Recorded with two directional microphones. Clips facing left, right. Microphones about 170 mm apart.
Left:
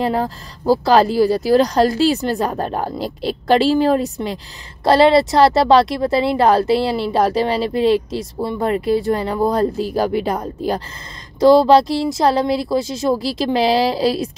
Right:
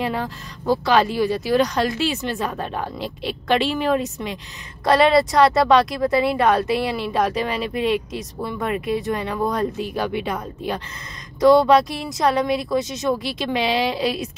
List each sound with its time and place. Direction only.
0.0 s speech: 35° left (ahead or behind)